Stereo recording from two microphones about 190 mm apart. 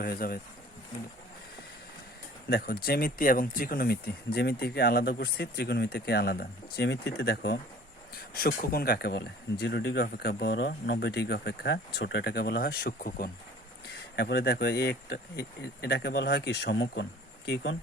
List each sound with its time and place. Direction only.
0.0 s speech: 50° left (ahead or behind)
2.5 s speech: 55° left (ahead or behind)